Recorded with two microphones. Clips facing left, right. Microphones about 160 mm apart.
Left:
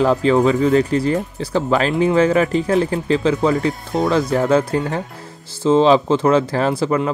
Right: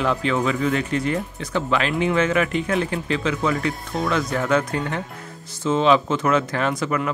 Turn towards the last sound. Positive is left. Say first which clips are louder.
# left 5 dB
turn(degrees=30)  # may be behind; listen again after turning